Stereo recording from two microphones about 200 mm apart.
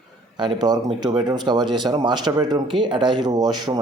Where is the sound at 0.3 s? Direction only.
20° right (ahead or behind).